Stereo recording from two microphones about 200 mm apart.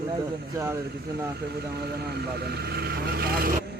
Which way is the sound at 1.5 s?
55° right (ahead or behind).